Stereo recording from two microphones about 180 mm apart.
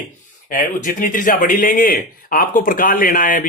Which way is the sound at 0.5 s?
45° left (ahead or behind).